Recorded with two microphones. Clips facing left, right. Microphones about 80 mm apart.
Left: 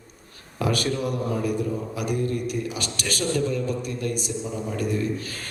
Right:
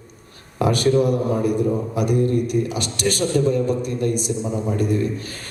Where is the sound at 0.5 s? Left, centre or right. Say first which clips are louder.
Right 8 dB; right.